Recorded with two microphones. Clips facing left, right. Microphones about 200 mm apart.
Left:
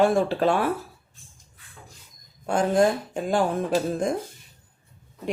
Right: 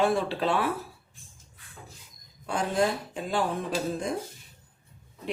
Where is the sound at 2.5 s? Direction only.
45° left (ahead or behind).